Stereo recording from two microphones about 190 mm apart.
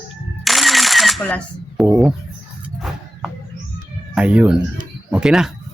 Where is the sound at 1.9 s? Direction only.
5° right (ahead or behind).